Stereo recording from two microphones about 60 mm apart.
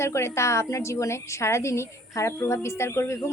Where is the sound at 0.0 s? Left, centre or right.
Left.